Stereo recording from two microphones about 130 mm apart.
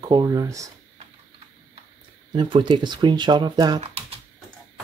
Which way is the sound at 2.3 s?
35° right (ahead or behind).